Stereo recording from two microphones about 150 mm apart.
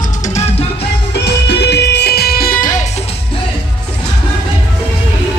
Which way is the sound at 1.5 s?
90° left.